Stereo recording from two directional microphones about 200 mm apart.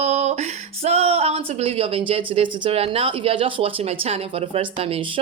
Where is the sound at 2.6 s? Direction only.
30° right (ahead or behind).